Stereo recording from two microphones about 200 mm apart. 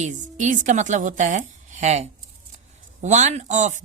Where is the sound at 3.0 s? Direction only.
35° right (ahead or behind).